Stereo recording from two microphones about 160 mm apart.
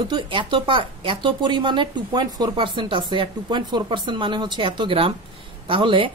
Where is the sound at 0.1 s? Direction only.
30° right (ahead or behind).